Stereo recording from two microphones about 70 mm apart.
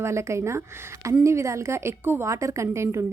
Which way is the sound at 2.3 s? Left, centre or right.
Right.